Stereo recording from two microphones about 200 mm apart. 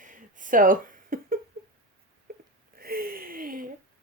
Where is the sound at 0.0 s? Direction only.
40° right (ahead or behind).